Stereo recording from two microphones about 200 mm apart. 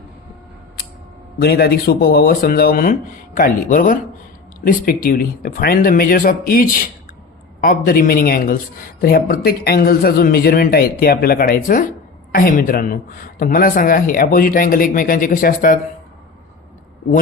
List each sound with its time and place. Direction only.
1.4 s a man's voice: 50° left (ahead or behind)